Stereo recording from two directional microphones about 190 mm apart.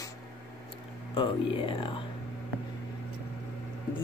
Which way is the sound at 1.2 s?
25° left (ahead or behind).